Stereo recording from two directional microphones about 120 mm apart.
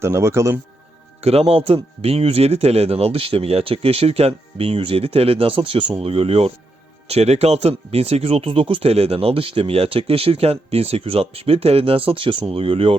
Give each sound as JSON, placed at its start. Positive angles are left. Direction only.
{"t": 0.0, "sound": "a man's voice", "side_deg": -20}
{"t": 1.2, "sound": "speech", "side_deg": -60}